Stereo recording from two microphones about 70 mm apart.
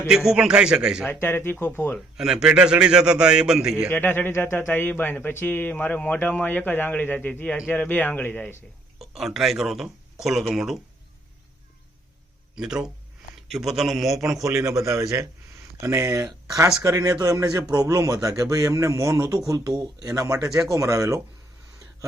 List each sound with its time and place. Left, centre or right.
0.1 s a man's voice: centre
1.0 s speech: left
2.1 s a man's voice: centre
3.8 s a man's voice: left
9.0 s speech: centre
12.5 s a man's voice: centre
14.4 s speech: right